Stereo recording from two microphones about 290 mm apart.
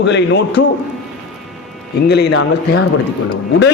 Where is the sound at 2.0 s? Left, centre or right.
Left.